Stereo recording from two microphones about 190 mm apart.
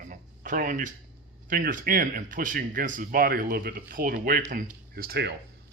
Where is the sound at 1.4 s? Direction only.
45° right (ahead or behind).